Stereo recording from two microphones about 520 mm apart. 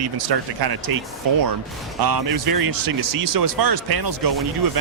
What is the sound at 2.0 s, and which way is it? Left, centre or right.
Speech, right.